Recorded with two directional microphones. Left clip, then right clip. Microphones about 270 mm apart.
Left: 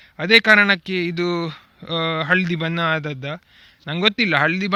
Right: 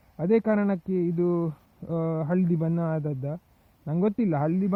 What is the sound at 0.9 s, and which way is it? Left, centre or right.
Speech, left.